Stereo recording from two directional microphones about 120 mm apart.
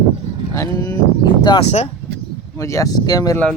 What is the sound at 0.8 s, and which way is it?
Speech, 40° left (ahead or behind).